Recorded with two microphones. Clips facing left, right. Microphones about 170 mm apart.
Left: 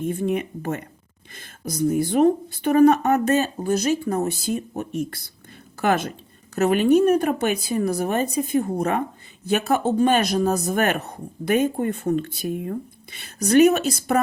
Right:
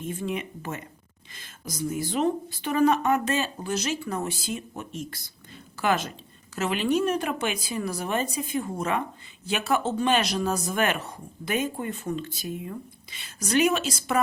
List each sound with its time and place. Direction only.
0.0 s speech: 55° left (ahead or behind); by 4.9 s 40° left (ahead or behind)
4.9 s speech: 60° left (ahead or behind)